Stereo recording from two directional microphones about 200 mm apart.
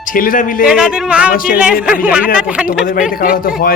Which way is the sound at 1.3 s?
45° left (ahead or behind).